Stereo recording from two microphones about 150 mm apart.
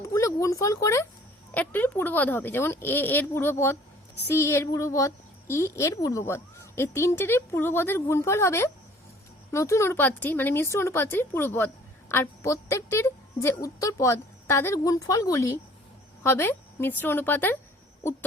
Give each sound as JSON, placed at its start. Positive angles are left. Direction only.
{"t": 0.0, "sound": "a woman's voice", "side_deg": 20}